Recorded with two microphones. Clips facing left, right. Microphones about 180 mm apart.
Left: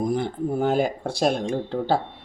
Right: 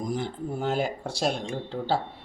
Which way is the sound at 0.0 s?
60° left (ahead or behind).